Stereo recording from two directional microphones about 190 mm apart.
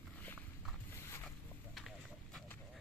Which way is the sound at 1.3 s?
Centre (ahead or behind).